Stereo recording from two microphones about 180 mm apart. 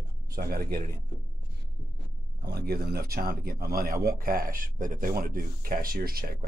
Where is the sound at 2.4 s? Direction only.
60° right (ahead or behind).